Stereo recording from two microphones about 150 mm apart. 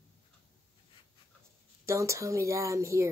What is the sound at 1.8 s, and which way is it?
Speech, 20° right (ahead or behind).